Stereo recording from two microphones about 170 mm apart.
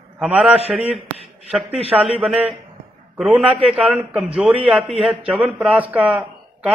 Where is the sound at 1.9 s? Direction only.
5° right (ahead or behind).